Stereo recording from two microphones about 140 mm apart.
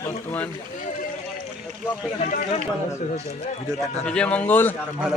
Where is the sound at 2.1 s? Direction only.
55° left (ahead or behind).